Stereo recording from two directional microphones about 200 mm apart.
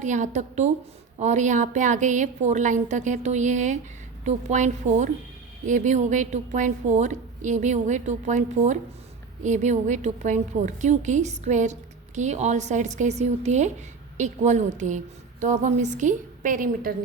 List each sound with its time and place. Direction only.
0.0 s a woman's voice: 35° right (ahead or behind)